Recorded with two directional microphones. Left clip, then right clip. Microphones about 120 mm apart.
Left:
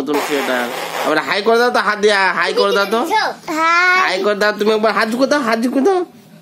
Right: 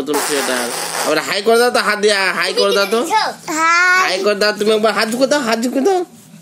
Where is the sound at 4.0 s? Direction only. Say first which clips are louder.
Even; 35° left (ahead or behind).